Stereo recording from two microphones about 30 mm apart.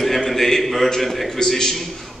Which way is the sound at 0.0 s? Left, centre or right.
Centre.